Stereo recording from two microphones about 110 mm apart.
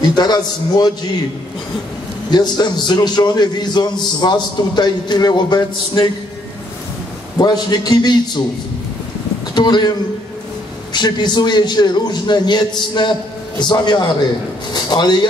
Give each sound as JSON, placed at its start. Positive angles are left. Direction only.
{"t": 0.1, "sound": "a man's voice", "side_deg": 40}
{"t": 2.3, "sound": "a man's voice", "side_deg": 40}
{"t": 7.3, "sound": "a man's voice", "side_deg": 40}
{"t": 9.6, "sound": "a man's voice", "side_deg": 40}